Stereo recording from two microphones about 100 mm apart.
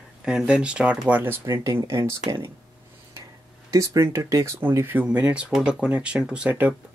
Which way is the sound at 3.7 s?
35° right (ahead or behind).